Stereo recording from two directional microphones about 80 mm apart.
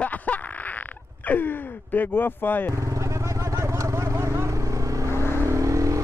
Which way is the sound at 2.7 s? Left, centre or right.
Right.